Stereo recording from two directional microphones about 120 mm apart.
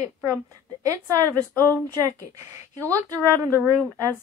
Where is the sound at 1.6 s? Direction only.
30° right (ahead or behind).